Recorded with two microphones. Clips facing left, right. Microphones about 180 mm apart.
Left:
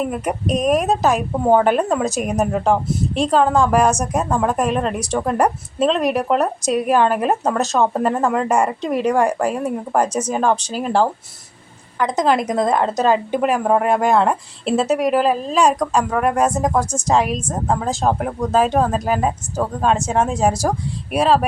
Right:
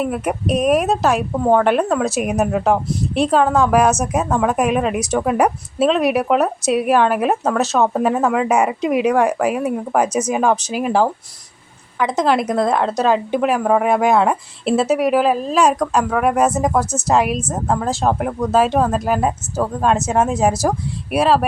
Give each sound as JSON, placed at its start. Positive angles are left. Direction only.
{"t": 0.0, "sound": "a woman's voice", "side_deg": -5}